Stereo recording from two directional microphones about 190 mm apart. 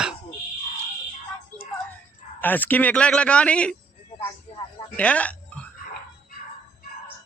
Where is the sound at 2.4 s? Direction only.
10° left (ahead or behind).